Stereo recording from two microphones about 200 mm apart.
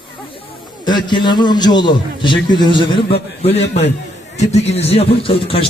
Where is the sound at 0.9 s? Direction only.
20° left (ahead or behind).